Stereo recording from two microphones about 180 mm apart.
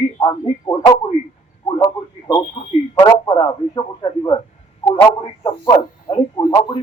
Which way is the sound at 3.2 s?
20° left (ahead or behind).